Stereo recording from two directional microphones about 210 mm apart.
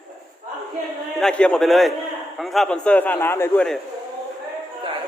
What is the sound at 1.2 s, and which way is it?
A man's voice, 5° left (ahead or behind).